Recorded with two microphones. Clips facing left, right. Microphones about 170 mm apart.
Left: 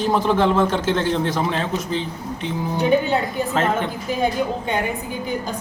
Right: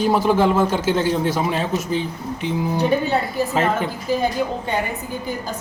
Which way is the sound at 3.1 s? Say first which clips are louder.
Even; 10° right (ahead or behind).